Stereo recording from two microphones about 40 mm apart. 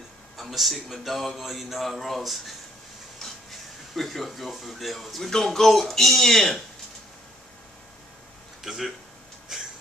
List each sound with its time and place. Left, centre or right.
0.4 s speech: centre
3.9 s speech: centre
8.6 s speech: centre
9.5 s a sound: centre